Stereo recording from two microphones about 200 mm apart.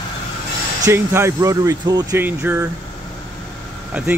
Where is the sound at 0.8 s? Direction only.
15° right (ahead or behind).